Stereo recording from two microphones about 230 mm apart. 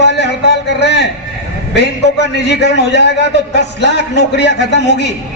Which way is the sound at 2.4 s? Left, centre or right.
Left.